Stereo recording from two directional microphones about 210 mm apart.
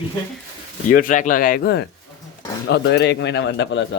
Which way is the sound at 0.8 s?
40° left (ahead or behind).